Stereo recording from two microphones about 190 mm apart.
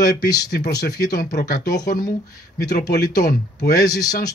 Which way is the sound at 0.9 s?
50° left (ahead or behind).